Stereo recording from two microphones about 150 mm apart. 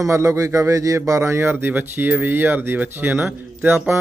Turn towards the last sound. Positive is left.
turn(degrees=-15)  # may be behind; listen again after turning